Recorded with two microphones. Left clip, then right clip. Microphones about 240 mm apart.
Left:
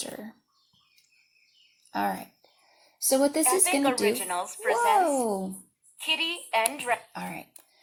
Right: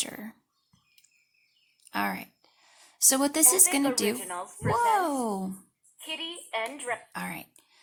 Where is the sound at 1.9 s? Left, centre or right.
Right.